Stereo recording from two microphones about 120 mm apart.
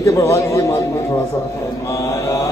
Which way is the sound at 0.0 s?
25° left (ahead or behind).